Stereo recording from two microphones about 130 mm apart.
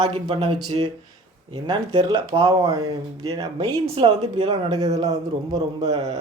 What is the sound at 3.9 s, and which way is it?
Speech, 40° right (ahead or behind).